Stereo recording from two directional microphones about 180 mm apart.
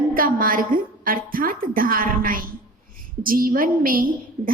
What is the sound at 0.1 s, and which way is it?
A woman's voice, 50° right (ahead or behind).